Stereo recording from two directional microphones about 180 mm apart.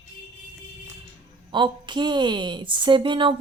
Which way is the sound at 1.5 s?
25° right (ahead or behind).